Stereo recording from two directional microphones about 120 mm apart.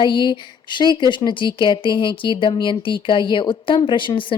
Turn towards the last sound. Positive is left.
turn(degrees=45)  # may be behind; listen again after turning